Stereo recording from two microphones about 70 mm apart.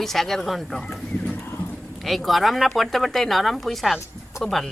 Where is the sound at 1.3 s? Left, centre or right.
Left.